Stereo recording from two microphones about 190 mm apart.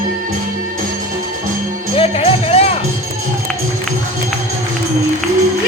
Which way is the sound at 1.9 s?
30° left (ahead or behind).